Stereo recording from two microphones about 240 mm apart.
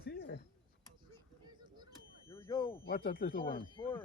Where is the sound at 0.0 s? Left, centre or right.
Left.